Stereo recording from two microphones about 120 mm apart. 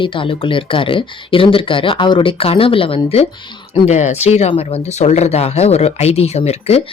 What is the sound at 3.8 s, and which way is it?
Speech, 70° left (ahead or behind).